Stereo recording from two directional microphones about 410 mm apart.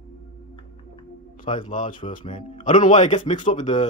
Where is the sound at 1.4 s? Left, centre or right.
Centre.